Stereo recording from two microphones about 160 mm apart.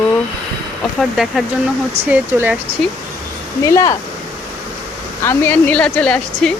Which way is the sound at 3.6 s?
20° left (ahead or behind).